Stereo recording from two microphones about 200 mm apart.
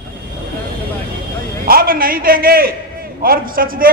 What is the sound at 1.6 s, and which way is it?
A man's voice, 45° right (ahead or behind).